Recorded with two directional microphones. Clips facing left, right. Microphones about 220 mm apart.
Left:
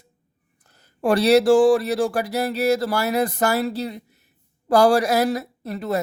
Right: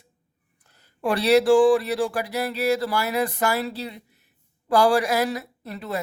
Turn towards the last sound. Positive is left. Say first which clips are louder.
# left 6 dB
turn(degrees=45)  # may be behind; listen again after turning